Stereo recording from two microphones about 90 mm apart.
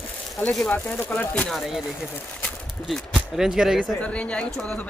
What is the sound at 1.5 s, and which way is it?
Speech, centre (ahead or behind).